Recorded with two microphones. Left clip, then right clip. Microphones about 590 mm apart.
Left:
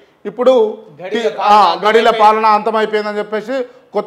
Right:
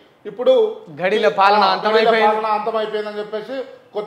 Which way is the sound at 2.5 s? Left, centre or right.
Left.